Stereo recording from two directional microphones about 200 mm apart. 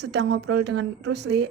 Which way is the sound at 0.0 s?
60° right (ahead or behind).